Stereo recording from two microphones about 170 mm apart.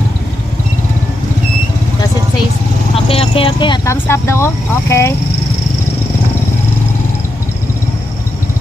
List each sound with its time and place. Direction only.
3.1 s speech: 35° left (ahead or behind)
3.9 s speech: 15° left (ahead or behind)